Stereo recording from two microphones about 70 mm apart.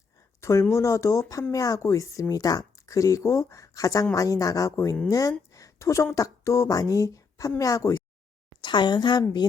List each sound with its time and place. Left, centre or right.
0.7 s speech: left
2.3 s speech: left
5.5 s a sound: left
6.1 s a woman's voice: left
8.6 s a woman's voice: left
9.4 s a woman's voice: left